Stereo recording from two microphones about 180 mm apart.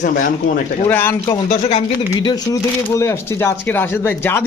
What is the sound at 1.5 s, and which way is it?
Speech, 40° left (ahead or behind).